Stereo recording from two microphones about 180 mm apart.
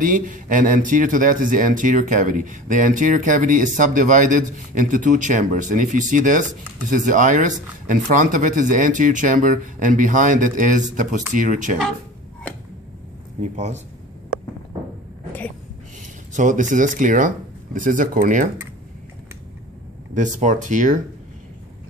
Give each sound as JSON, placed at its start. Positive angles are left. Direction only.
{"t": 0.0, "sound": "speech", "side_deg": -45}
{"t": 13.4, "sound": "speech", "side_deg": -40}
{"t": 16.3, "sound": "speech", "side_deg": -45}
{"t": 20.2, "sound": "speech", "side_deg": -45}